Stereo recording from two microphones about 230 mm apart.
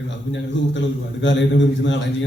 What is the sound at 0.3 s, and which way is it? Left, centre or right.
A man's voice, left.